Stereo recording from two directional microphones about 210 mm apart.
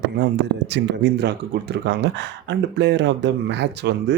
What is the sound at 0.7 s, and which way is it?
Speech, 55° right (ahead or behind).